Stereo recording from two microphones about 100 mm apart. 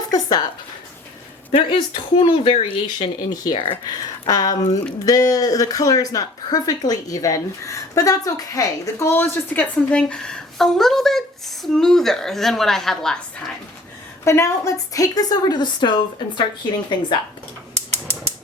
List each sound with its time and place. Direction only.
0.1 s speech: 40° left (ahead or behind)
1.5 s speech: 65° left (ahead or behind)
2.8 s speech: 45° left (ahead or behind)
3.5 s speech: 60° left (ahead or behind)
3.8 s speech: 40° left (ahead or behind)
9.1 s a woman's voice: 20° left (ahead or behind)
14.3 s speech: 30° left (ahead or behind); by 16.5 s 50° left (ahead or behind)